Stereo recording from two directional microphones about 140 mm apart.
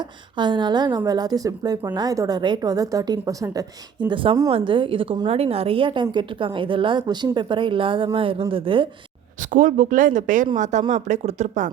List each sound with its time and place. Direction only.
0.3 s a woman's voice: 35° right (ahead or behind)
4.1 s a woman's voice: 40° right (ahead or behind)
9.5 s speech: 65° right (ahead or behind)